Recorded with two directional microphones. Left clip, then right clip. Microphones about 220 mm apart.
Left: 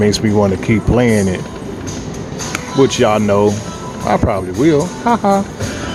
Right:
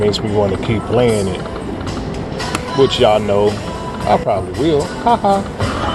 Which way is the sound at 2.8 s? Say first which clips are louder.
Right 1 dB; 35° left (ahead or behind).